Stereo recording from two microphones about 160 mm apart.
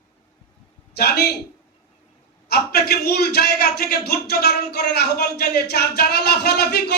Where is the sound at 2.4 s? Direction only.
85° left.